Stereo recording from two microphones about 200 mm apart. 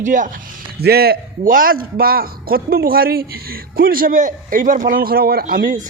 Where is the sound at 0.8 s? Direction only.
50° right (ahead or behind).